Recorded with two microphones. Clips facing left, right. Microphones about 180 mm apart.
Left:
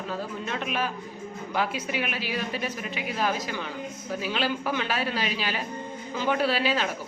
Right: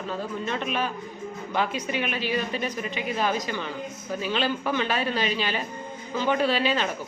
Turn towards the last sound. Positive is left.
turn(degrees=5)  # may be behind; listen again after turning